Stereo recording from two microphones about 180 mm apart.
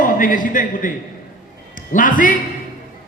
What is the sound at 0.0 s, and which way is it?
A man's voice, 50° left (ahead or behind).